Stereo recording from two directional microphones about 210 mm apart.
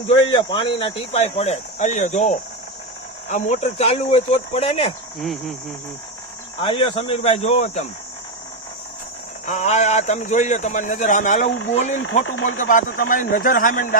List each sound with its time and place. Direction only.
0.1 s speech: 20° left (ahead or behind)
5.2 s cricket: centre (ahead or behind)
6.6 s speech: 25° left (ahead or behind)
9.5 s speech: 35° left (ahead or behind)
11.5 s speech: 65° left (ahead or behind)
11.8 s speech: 35° left (ahead or behind)
12.2 s speech: 70° left (ahead or behind)
12.5 s speech: 40° left (ahead or behind)